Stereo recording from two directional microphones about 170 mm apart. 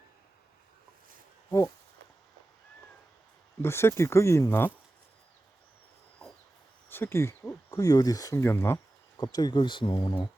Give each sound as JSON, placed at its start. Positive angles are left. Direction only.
{"t": 3.6, "sound": "speech", "side_deg": 15}
{"t": 6.9, "sound": "speech", "side_deg": 15}
{"t": 9.1, "sound": "speech", "side_deg": 25}